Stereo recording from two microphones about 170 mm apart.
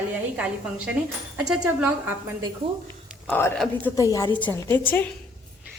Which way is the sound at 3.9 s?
20° left (ahead or behind).